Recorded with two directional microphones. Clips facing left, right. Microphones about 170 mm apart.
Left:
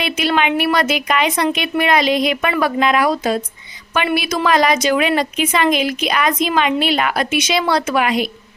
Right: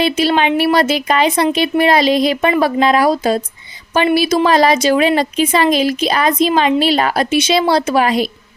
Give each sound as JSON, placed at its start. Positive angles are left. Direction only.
{"t": 0.0, "sound": "speech", "side_deg": -30}